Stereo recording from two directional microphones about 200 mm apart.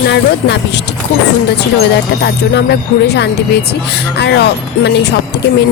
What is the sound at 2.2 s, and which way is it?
A woman's voice, 55° left (ahead or behind).